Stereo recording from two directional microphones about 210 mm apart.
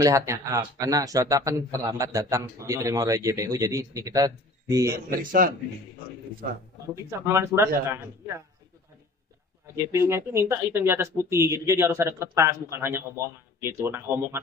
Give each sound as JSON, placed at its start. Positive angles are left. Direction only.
{"t": 0.0, "sound": "speech", "side_deg": -15}
{"t": 5.2, "sound": "a man's voice", "side_deg": -40}
{"t": 7.1, "sound": "speech", "side_deg": -15}
{"t": 9.9, "sound": "speech", "side_deg": -15}